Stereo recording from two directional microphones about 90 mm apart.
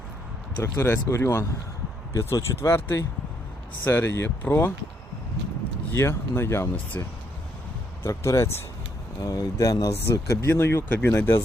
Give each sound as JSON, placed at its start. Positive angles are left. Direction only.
{"t": 0.6, "sound": "speech", "side_deg": 25}
{"t": 5.9, "sound": "speech", "side_deg": 30}
{"t": 10.0, "sound": "speech", "side_deg": 30}